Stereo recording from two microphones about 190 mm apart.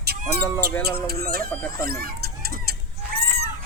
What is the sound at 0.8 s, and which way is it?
Speech, 55° right (ahead or behind).